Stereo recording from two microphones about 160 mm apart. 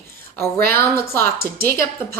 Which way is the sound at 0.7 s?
15° left (ahead or behind).